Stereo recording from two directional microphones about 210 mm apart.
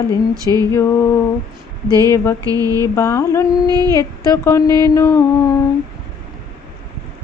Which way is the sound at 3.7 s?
20° right (ahead or behind).